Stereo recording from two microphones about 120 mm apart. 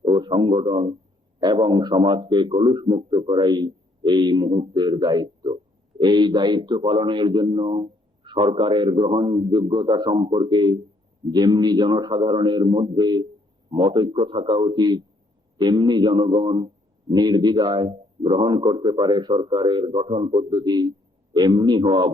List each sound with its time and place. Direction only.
0.0 s a man's voice: 40° right (ahead or behind)